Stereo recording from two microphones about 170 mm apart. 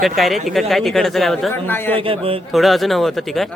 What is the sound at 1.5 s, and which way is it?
Speech, 10° left (ahead or behind).